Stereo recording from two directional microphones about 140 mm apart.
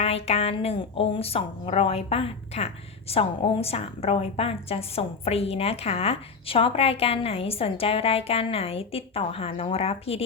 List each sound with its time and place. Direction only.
0.0 s a woman's voice: 45° left (ahead or behind)